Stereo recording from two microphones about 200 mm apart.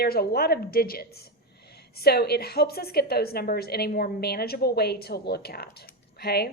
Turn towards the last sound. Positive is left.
turn(degrees=50)  # may be behind; listen again after turning